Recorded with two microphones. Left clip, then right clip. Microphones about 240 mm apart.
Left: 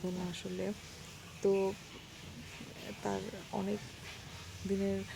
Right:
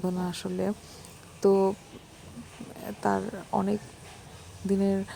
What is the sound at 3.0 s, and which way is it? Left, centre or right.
Speech, centre.